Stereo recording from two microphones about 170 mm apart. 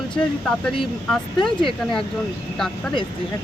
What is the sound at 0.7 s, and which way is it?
Speech, centre (ahead or behind).